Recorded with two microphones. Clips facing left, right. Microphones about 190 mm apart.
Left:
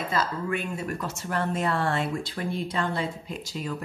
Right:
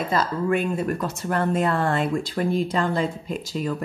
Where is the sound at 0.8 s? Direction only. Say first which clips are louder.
Right 6 dB; 55° right (ahead or behind).